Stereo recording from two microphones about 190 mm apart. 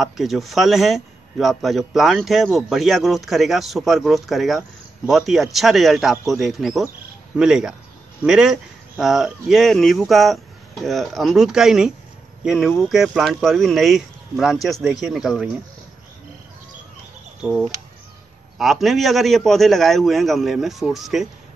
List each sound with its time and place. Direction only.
0.0 s a man's voice: centre (ahead or behind)
17.4 s a man's voice: 5° right (ahead or behind)